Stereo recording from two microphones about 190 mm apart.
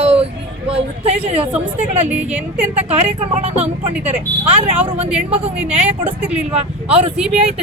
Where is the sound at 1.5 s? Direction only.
10° right (ahead or behind).